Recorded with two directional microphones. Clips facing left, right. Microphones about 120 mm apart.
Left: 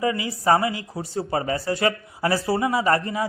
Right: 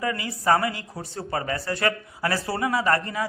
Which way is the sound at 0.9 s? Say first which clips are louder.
Left 6 dB; 5° left (ahead or behind).